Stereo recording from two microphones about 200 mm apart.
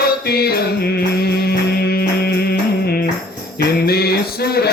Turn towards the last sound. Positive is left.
turn(degrees=50)  # may be behind; listen again after turning